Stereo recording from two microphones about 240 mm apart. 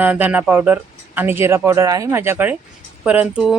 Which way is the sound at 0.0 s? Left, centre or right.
Centre.